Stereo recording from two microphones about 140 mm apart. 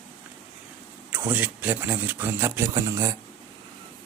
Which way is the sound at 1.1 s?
15° right (ahead or behind).